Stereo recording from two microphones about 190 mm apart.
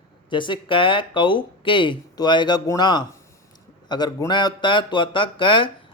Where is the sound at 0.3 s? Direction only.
25° left (ahead or behind).